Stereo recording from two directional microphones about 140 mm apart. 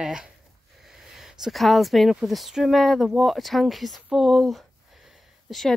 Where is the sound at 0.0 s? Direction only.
5° right (ahead or behind).